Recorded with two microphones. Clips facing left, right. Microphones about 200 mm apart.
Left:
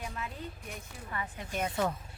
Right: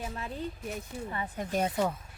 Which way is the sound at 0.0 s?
30° right (ahead or behind).